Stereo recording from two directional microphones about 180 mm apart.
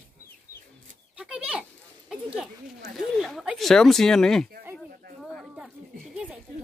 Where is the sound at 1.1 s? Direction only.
5° right (ahead or behind).